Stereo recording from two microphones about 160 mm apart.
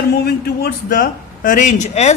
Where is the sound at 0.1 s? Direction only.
75° left (ahead or behind).